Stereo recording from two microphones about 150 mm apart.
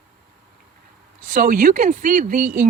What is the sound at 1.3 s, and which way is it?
Speech, 70° right (ahead or behind).